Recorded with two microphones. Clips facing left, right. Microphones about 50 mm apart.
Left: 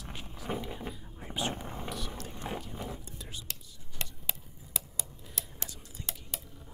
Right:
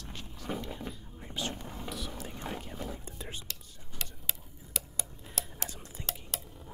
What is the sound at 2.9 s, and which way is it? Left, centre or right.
Whispering, right.